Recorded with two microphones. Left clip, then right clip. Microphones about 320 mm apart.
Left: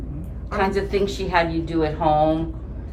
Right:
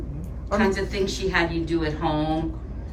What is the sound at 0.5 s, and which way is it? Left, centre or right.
A woman's voice, centre.